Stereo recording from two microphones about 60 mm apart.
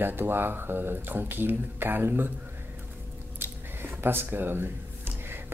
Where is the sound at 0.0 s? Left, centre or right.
Right.